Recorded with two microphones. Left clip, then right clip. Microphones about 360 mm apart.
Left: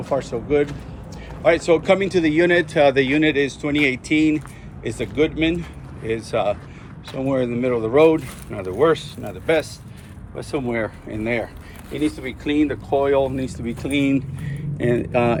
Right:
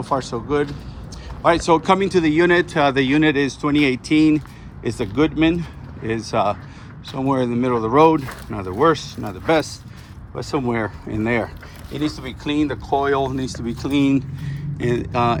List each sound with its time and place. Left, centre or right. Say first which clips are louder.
0.1 s speech: left 1 dB; centre
2.5 s speech: left 1 dB; right
3.9 s speech: right 2 dB; centre
4.3 s a sound: right 3 dB; right
4.9 s speech: right 1 dB; centre
11.1 s speech: right 3 dB; right
11.9 s speech: left 1 dB; centre